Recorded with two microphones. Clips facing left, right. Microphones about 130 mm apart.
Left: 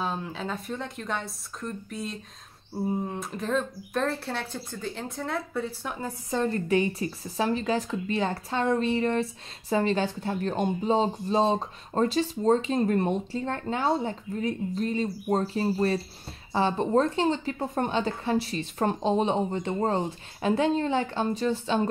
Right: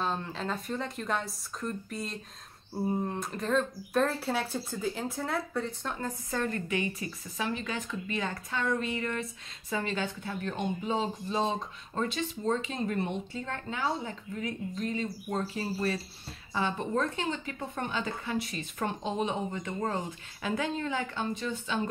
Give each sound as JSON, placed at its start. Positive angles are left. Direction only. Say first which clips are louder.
{"t": 0.0, "sound": "speech", "louder": "left 1 dB", "side_deg": 5}
{"t": 6.3, "sound": "speech", "louder": "left 7 dB", "side_deg": 30}